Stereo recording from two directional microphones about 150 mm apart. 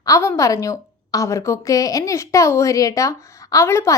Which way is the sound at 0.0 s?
20° left (ahead or behind).